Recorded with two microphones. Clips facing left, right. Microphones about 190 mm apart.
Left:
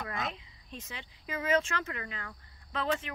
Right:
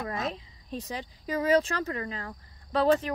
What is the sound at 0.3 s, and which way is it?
Speech, 35° right (ahead or behind).